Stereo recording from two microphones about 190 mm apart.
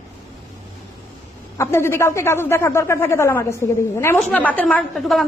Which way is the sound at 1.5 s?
15° left (ahead or behind).